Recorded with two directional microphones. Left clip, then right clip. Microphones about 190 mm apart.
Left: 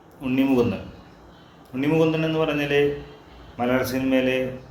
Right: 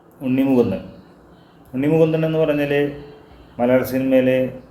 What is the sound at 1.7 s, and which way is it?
Speech, 20° right (ahead or behind).